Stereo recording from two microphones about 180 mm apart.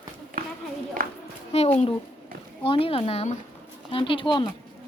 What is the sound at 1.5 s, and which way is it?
A woman's voice, 35° left (ahead or behind).